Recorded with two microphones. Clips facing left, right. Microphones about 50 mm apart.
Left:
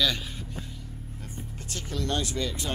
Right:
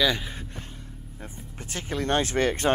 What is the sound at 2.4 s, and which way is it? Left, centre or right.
Speech, right.